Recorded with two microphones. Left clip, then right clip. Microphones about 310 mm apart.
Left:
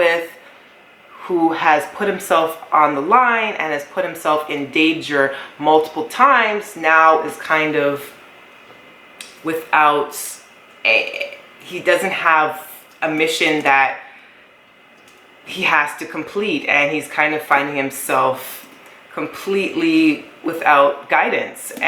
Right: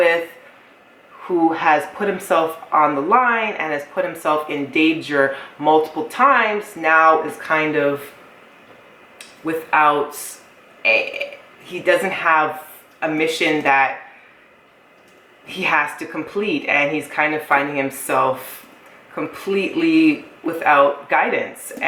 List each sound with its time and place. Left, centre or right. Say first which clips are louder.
0.0 s a sound: even; centre
1.3 s speech: even; centre
1.5 s speech: left 1 dB; centre
9.5 s a woman's voice: left 1 dB; centre
15.4 s speech: left 2 dB; centre